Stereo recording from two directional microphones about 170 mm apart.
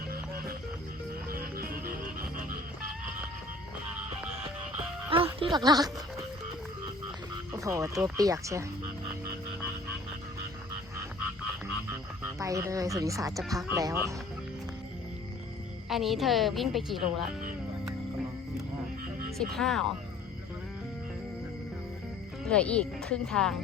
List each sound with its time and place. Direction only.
1.3 s music: 60° right (ahead or behind)
5.0 s music: 35° right (ahead or behind)
7.5 s speech: 20° right (ahead or behind)
12.4 s speech: 20° right (ahead or behind)
15.9 s a woman's voice: centre (ahead or behind)
19.4 s a woman's voice: centre (ahead or behind)
22.4 s a woman's voice: 5° left (ahead or behind)